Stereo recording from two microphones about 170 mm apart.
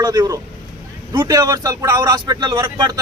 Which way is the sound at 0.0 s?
25° right (ahead or behind).